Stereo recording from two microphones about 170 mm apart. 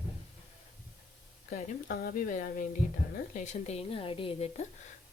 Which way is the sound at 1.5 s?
60° left (ahead or behind).